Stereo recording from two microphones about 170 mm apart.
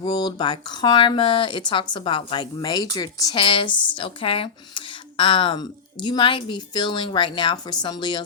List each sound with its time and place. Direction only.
0.0 s speech: 25° left (ahead or behind)